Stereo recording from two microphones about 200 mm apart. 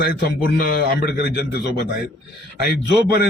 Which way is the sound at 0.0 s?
50° left (ahead or behind).